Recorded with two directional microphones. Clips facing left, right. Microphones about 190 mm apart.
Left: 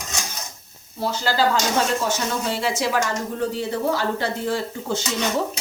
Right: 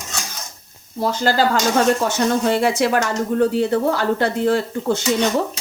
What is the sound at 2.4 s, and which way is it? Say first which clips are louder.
A woman's voice: right 6 dB; 60° right (ahead or behind).